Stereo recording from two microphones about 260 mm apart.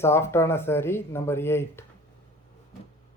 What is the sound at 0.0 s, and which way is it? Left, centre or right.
Speech, centre.